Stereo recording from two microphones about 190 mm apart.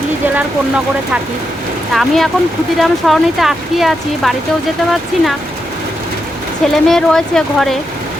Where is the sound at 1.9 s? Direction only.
Centre (ahead or behind).